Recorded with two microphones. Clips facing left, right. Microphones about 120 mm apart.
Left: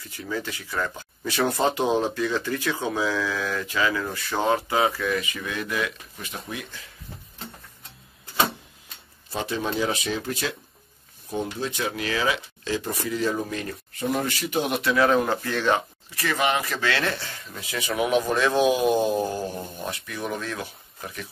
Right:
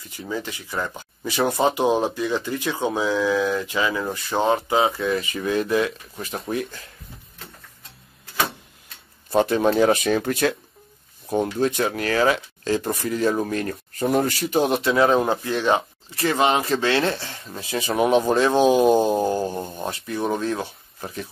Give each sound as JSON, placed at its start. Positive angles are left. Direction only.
{"t": 0.1, "sound": "speech", "side_deg": -20}
{"t": 9.3, "sound": "speech", "side_deg": -50}